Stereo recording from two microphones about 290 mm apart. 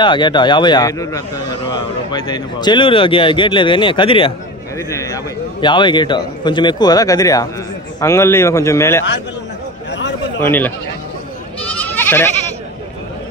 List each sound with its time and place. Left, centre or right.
0.0 s a man's voice: centre
10.4 s a man's voice: centre
11.7 s goat: centre